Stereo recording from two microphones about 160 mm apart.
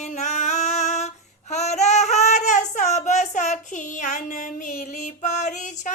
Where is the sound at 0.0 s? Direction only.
50° left (ahead or behind).